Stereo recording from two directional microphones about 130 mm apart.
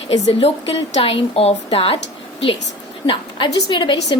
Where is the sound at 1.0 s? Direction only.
45° left (ahead or behind).